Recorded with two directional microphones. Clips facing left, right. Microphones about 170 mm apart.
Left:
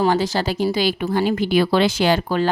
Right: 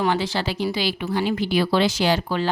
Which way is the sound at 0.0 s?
40° left (ahead or behind).